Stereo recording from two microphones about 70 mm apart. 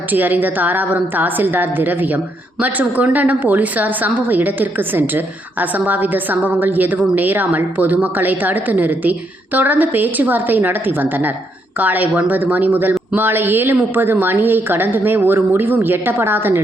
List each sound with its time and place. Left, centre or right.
0.1 s a woman's voice: right